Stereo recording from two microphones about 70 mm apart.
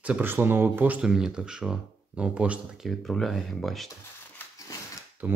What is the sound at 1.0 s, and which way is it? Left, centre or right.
Speech, centre.